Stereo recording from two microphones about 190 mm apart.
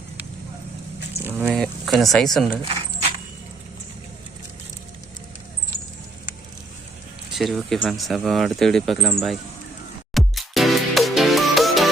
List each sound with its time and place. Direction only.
1.2 s speech: 10° right (ahead or behind)
1.5 s speech: centre (ahead or behind)
7.3 s speech: centre (ahead or behind)
10.2 s music: centre (ahead or behind)